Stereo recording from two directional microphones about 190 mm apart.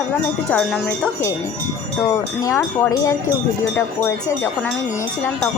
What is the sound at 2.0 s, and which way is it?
Speech, 15° left (ahead or behind).